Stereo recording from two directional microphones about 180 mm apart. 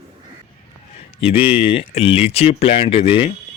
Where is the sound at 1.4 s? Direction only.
30° left (ahead or behind).